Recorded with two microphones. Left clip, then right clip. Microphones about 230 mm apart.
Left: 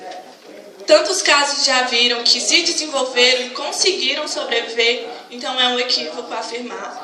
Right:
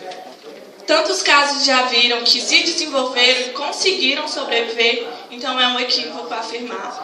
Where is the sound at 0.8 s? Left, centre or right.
Left.